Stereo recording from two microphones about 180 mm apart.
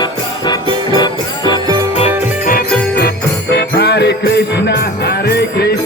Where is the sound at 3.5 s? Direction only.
65° left (ahead or behind).